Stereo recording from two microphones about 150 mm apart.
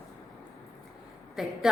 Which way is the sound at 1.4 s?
Centre (ahead or behind).